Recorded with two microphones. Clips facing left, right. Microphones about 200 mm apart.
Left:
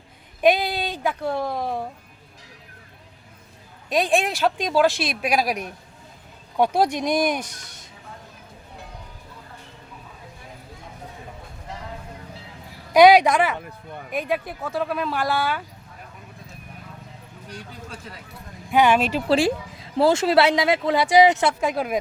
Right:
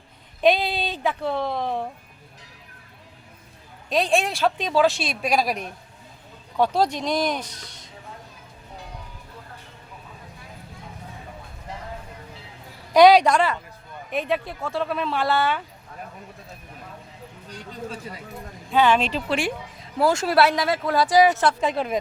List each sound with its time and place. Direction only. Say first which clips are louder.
0.4 s speech: left 1 dB; 15° left (ahead or behind)
4.0 s speech: left 1 dB; 10° left (ahead or behind)
6.6 s speech: left 1 dB; 15° left (ahead or behind)
12.9 s speech: left 1 dB; 15° left (ahead or behind)
18.7 s speech: left 1 dB; 10° left (ahead or behind)
19.3 s speech: left 6 dB; 35° left (ahead or behind)
21.6 s speech: even; 5° left (ahead or behind)